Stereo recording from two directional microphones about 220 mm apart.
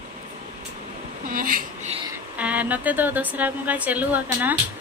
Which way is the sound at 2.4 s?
5° right (ahead or behind).